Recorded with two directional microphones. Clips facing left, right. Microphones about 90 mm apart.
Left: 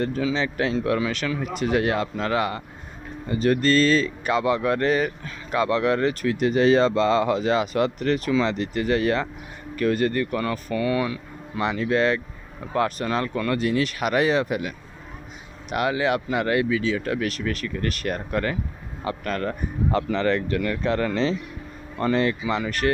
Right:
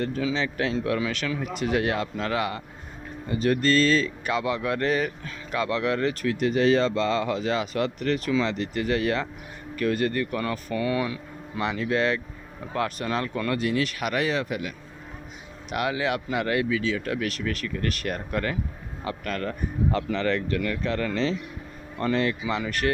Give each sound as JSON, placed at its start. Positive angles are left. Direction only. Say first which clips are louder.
{"t": 0.3, "sound": "speech", "louder": "left 2 dB", "side_deg": 0}
{"t": 11.0, "sound": "music", "louder": "left 2 dB", "side_deg": -10}
{"t": 11.6, "sound": "speech", "louder": "left 3 dB", "side_deg": 0}
{"t": 15.7, "sound": "speech", "louder": "left 4 dB", "side_deg": -5}
{"t": 19.2, "sound": "speech", "louder": "left 2 dB", "side_deg": 20}
{"t": 20.7, "sound": "speech", "louder": "left 4 dB", "side_deg": 25}
{"t": 22.0, "sound": "speech", "louder": "left 3 dB", "side_deg": 5}